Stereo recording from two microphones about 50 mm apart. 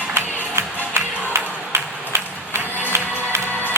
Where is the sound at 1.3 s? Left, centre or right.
Right.